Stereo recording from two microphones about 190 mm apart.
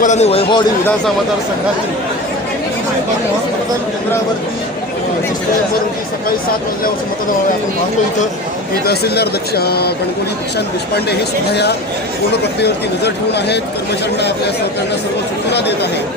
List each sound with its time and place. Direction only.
0.0 s speech: 35° left (ahead or behind)
8.9 s speech: 55° left (ahead or behind)
15.5 s speech: 60° left (ahead or behind)